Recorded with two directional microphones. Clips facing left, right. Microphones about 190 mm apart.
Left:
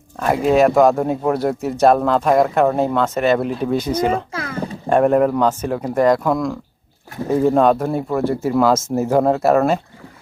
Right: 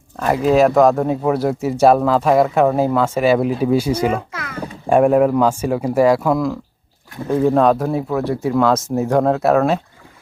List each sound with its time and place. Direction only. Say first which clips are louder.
0.2 s speech: right 1 dB; centre (ahead or behind)
4.3 s a sound: left 4 dB; 30° left (ahead or behind)
4.9 s speech: right 2 dB; 5° right (ahead or behind)